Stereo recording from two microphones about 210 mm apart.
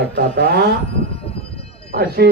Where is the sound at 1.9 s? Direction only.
50° right (ahead or behind).